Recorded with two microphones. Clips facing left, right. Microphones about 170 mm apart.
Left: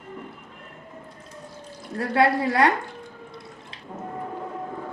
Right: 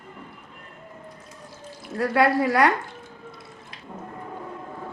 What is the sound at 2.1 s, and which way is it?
Speech, 25° left (ahead or behind).